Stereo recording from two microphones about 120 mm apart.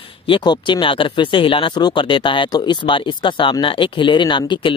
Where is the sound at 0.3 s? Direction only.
40° left (ahead or behind).